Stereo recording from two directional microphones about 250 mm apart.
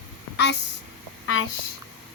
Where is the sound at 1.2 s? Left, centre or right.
Left.